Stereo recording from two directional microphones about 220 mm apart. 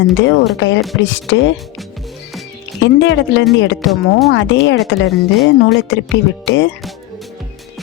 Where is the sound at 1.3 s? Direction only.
55° left (ahead or behind).